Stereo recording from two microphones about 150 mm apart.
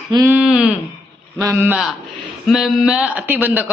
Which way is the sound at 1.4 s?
20° right (ahead or behind).